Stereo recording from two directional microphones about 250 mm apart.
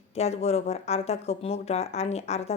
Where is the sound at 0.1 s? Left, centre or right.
Left.